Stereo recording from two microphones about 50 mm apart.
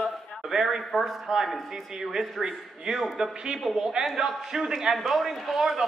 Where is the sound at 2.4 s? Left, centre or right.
Centre.